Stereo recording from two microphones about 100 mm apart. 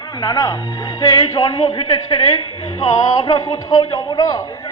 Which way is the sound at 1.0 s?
50° left (ahead or behind).